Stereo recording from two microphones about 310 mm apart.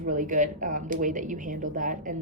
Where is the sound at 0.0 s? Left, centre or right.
Right.